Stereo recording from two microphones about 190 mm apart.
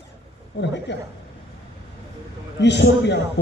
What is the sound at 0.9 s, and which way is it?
Speech, 70° left (ahead or behind).